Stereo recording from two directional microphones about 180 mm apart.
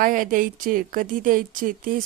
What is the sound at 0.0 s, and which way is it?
Speech, 50° right (ahead or behind).